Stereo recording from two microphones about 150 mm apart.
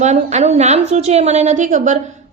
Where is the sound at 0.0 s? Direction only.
50° right (ahead or behind).